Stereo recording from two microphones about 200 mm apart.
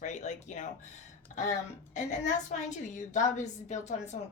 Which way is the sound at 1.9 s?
35° left (ahead or behind).